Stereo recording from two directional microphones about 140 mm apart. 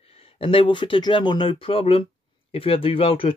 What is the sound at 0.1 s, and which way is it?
Speech, 40° left (ahead or behind).